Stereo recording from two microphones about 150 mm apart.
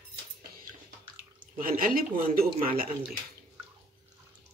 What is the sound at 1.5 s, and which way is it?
Speech, 70° right (ahead or behind).